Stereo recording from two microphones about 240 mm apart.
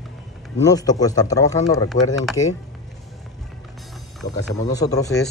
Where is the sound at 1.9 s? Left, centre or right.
Left.